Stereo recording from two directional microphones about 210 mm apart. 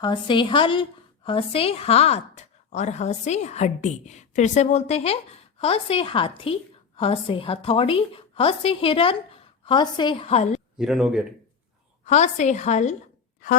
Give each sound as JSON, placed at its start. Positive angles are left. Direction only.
{"t": 0.0, "sound": "speech", "side_deg": 20}
{"t": 10.8, "sound": "speech", "side_deg": -5}
{"t": 12.0, "sound": "a woman's voice", "side_deg": 35}